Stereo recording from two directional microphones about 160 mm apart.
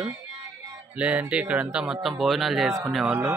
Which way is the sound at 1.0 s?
10° right (ahead or behind).